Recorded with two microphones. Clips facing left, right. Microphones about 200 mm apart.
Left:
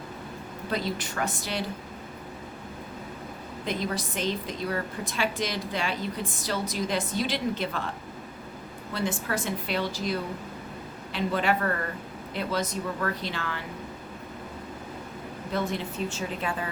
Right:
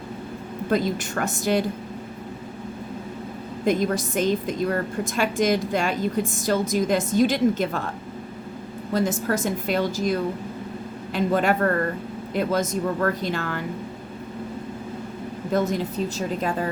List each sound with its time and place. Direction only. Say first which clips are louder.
0.7 s a woman's voice: right 7 dB; 50° right (ahead or behind)
3.7 s a woman's voice: right 9 dB; 45° right (ahead or behind)
8.9 s a woman's voice: right 7 dB; 40° right (ahead or behind)
15.5 s a woman's voice: right 6 dB; 40° right (ahead or behind)